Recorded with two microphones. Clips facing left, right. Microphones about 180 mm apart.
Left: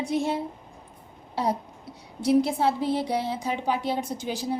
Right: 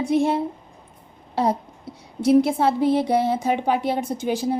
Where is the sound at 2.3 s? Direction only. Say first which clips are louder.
Right 4 dB; 60° right (ahead or behind).